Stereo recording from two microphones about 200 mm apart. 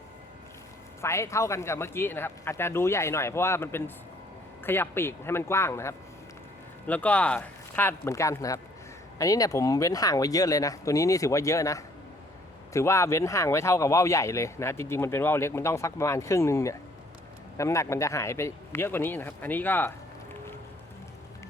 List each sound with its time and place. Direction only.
1.0 s speech: 15° left (ahead or behind)